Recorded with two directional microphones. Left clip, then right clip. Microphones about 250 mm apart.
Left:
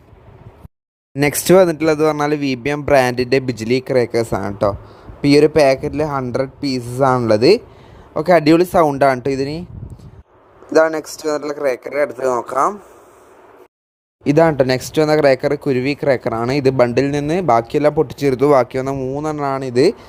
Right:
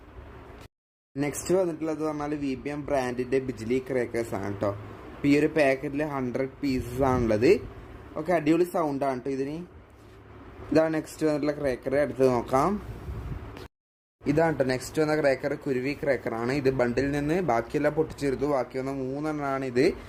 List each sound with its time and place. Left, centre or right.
1.1 s speech: left
10.7 s speech: left
14.3 s speech: left